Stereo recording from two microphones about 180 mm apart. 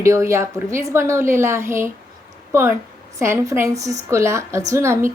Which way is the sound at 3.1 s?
15° right (ahead or behind).